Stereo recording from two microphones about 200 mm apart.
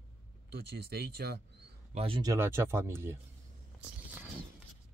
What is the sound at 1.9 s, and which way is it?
Speech, 25° right (ahead or behind).